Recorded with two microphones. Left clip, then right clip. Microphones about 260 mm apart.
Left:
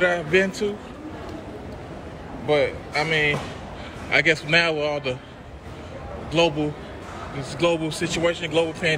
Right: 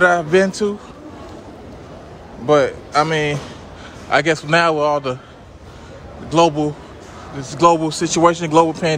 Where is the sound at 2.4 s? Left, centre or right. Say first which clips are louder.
Right 7 dB; right.